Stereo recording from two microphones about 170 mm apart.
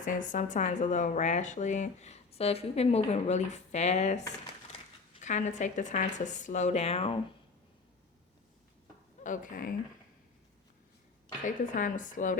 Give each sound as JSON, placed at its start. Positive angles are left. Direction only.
{"t": 0.0, "sound": "speech", "side_deg": 50}
{"t": 5.2, "sound": "speech", "side_deg": 45}
{"t": 9.2, "sound": "speech", "side_deg": 50}
{"t": 11.4, "sound": "speech", "side_deg": 50}